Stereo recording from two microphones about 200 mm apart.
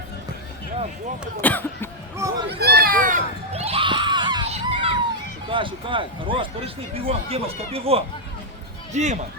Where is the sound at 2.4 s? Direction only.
55° right (ahead or behind); by 4.9 s 25° right (ahead or behind).